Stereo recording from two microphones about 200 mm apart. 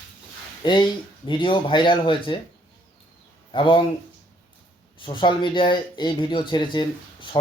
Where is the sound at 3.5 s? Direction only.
25° left (ahead or behind).